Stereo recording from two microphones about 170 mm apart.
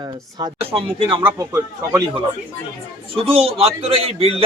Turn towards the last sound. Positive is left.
turn(degrees=-35)  # may be behind; listen again after turning